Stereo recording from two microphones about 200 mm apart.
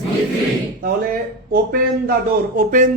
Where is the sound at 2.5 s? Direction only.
45° right (ahead or behind).